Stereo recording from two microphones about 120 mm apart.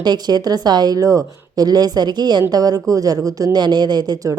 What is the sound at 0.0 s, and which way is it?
Speech, 35° right (ahead or behind).